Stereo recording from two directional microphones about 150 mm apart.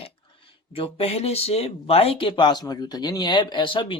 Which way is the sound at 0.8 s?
40° left (ahead or behind).